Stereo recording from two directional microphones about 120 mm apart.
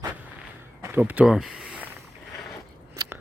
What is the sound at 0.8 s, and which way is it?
Speech, 20° right (ahead or behind).